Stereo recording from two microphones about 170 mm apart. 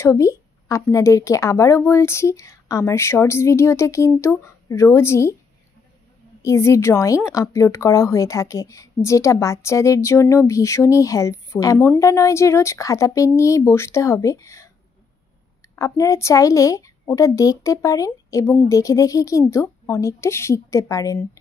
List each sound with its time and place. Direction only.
0.0 s speech: 15° left (ahead or behind)
6.4 s speech: 15° left (ahead or behind)
15.7 s a woman's voice: 20° left (ahead or behind)